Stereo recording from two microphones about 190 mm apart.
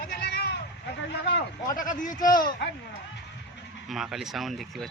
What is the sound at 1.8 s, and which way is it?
Speech, 45° left (ahead or behind).